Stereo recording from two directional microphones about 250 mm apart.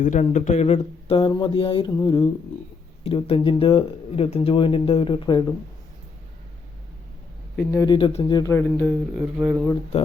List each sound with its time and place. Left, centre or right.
0.0 s speech: left
7.7 s speech: centre
9.1 s speech: centre